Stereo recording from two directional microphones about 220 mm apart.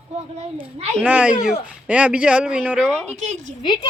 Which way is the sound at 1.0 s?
5° right (ahead or behind).